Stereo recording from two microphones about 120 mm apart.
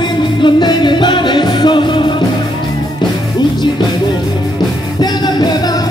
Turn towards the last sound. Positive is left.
turn(degrees=35)  # may be behind; listen again after turning